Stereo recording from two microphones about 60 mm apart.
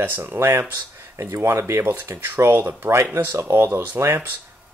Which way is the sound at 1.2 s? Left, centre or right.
Right.